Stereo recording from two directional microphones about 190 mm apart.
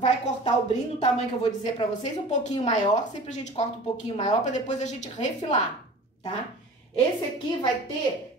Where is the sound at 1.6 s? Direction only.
35° left (ahead or behind).